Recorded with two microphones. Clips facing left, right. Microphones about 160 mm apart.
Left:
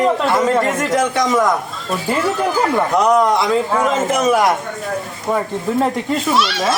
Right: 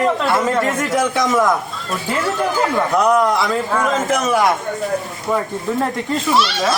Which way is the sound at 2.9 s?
Centre (ahead or behind).